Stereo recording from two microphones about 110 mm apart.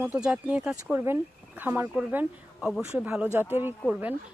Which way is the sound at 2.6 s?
5° right (ahead or behind).